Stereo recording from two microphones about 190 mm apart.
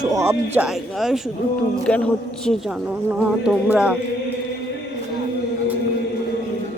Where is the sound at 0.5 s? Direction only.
Centre (ahead or behind).